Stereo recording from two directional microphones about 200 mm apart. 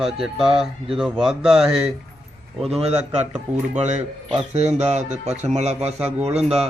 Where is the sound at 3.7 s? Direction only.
35° right (ahead or behind).